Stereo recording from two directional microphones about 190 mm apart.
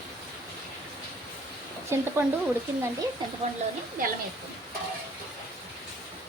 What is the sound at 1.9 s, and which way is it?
Speech, 15° right (ahead or behind).